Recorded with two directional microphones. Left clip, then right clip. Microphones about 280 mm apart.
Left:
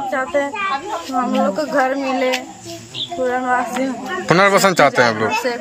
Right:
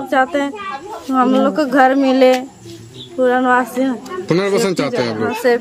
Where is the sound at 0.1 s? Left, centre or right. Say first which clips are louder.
Right 6 dB; centre.